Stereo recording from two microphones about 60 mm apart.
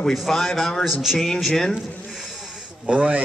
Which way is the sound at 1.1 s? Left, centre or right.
Centre.